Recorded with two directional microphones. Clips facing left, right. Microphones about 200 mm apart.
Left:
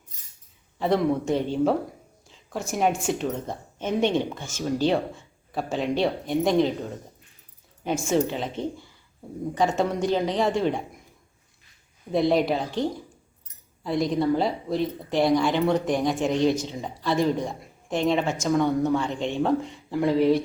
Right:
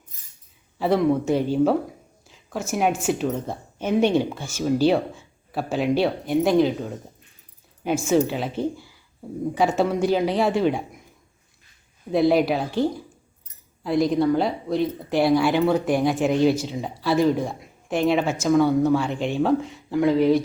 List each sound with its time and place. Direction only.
0.8 s speech: 5° right (ahead or behind)
7.9 s a woman's voice: 5° right (ahead or behind)
12.1 s speech: 5° right (ahead or behind)